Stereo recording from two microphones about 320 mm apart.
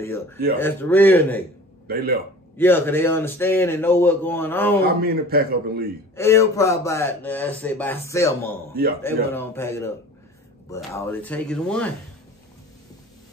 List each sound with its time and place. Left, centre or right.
0.0 s speech: centre
2.5 s speech: centre
4.8 s a man's voice: right
6.1 s speech: centre